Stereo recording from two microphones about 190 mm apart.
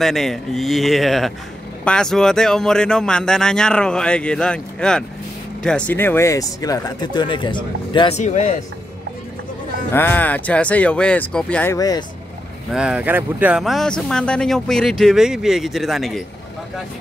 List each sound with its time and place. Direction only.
0.0 s speech: centre (ahead or behind); by 8.2 s 25° left (ahead or behind)
8.2 s speech: 40° left (ahead or behind)
9.9 s speech: 10° left (ahead or behind)
12.7 s speech: 5° right (ahead or behind)